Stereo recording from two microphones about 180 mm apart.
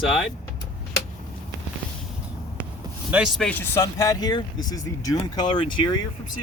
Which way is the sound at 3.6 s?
15° left (ahead or behind).